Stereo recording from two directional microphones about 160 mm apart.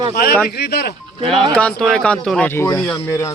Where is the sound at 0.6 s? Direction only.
85° left.